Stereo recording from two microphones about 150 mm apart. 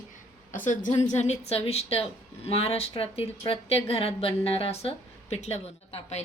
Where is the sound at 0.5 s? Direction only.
60° left (ahead or behind).